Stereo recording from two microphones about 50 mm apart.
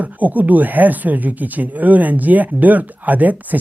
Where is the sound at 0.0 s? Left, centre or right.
Right.